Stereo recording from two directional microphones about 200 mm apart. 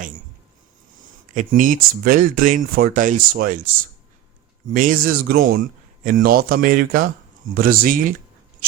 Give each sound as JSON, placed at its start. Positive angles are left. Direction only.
{"t": 1.3, "sound": "speech", "side_deg": -40}
{"t": 4.7, "sound": "speech", "side_deg": -45}